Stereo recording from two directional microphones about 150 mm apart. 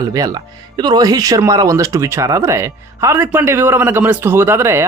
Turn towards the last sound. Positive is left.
turn(degrees=-15)  # may be behind; listen again after turning